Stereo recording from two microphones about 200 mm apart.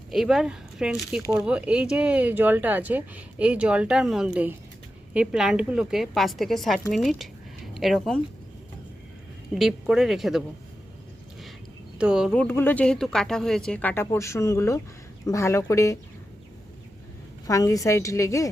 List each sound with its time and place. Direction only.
0.1 s a woman's voice: centre (ahead or behind)
9.6 s a woman's voice: centre (ahead or behind)
11.9 s speech: 5° right (ahead or behind); by 16.0 s 15° left (ahead or behind)
17.4 s speech: 15° left (ahead or behind)